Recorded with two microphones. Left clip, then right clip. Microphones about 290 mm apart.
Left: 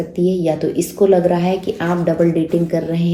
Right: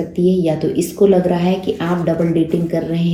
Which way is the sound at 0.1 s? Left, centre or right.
Left.